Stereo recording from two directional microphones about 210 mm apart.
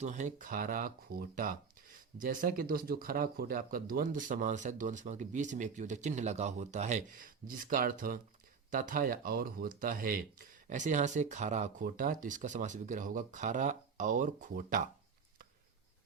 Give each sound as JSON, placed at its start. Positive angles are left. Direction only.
{"t": 0.0, "sound": "speech", "side_deg": -35}